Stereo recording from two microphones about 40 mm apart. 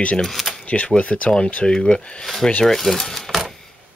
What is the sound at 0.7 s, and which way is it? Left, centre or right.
Speech, left.